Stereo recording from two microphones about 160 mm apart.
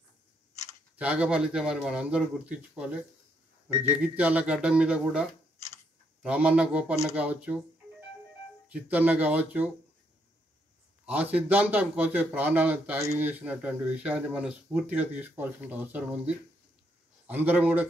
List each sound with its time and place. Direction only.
0.9 s speech: 10° right (ahead or behind)
6.2 s speech: 5° right (ahead or behind)
8.6 s speech: 10° right (ahead or behind)
11.1 s speech: 10° right (ahead or behind)
17.3 s speech: 10° right (ahead or behind)